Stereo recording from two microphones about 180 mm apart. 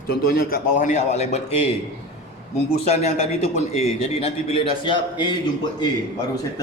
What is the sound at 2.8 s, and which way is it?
A man's voice, 35° left (ahead or behind).